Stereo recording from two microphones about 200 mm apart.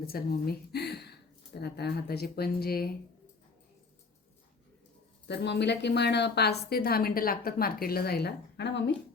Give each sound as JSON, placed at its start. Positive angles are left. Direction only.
{"t": 0.0, "sound": "a woman's voice", "side_deg": 50}
{"t": 5.3, "sound": "a woman's voice", "side_deg": 55}